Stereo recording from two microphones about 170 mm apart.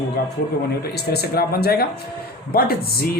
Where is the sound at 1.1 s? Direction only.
70° left (ahead or behind).